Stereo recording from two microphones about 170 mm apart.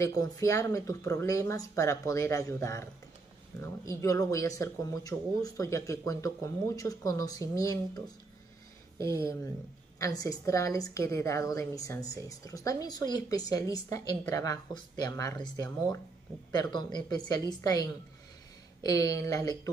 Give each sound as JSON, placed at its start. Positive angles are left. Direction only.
{"t": 0.0, "sound": "a woman's voice", "side_deg": 20}
{"t": 9.0, "sound": "a woman's voice", "side_deg": 20}